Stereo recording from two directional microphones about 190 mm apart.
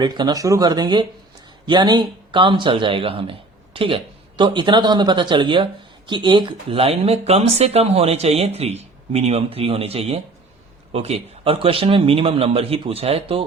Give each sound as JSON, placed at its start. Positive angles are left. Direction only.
{"t": 0.0, "sound": "speech", "side_deg": -20}